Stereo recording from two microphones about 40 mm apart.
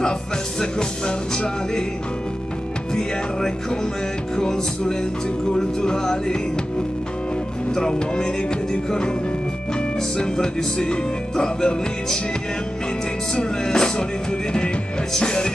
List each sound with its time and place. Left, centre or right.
0.6 s speech: left
2.9 s speech: centre
7.7 s speech: centre
13.3 s speech: centre
15.1 s speech: left